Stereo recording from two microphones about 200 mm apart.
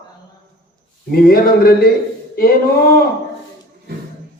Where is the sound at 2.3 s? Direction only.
50° left (ahead or behind).